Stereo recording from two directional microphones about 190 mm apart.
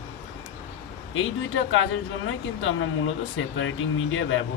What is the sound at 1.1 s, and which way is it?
Speech, 90° left.